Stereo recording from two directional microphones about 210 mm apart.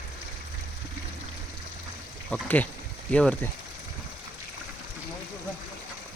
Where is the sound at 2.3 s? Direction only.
5° left (ahead or behind).